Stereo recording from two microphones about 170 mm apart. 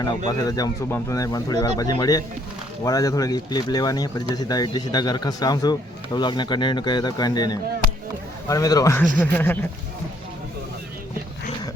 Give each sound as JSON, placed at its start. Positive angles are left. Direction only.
{"t": 0.3, "sound": "speech", "side_deg": 20}